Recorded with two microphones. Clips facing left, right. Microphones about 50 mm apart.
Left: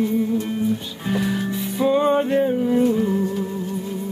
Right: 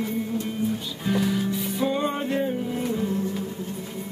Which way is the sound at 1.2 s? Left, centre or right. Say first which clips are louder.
Left 1 dB; left.